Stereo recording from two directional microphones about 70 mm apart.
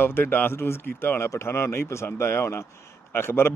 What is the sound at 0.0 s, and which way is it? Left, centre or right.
A man's voice, left.